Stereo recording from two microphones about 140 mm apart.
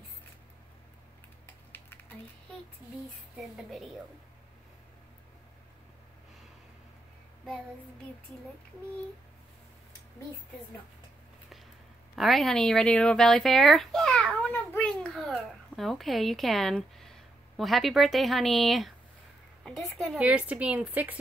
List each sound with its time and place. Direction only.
1.4 s a sound: 15° left (ahead or behind)
3.3 s a child's voice: centre (ahead or behind)
12.2 s a child's voice: centre (ahead or behind)
20.2 s a woman's voice: 10° right (ahead or behind)